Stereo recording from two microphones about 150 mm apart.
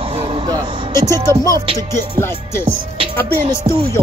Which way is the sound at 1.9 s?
15° left (ahead or behind).